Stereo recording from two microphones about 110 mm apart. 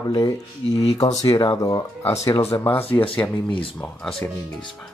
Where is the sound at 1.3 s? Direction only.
55° left (ahead or behind).